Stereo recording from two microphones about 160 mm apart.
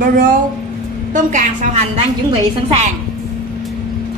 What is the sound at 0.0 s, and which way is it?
A woman's voice, 60° right (ahead or behind).